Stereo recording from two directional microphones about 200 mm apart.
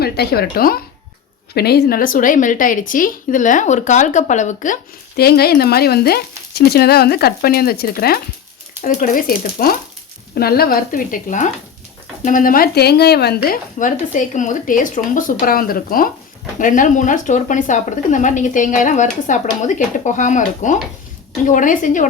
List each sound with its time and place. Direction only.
0.0 s a woman's voice: 50° left (ahead or behind)